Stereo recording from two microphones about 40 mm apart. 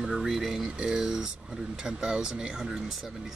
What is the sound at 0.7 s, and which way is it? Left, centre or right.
Speech, right.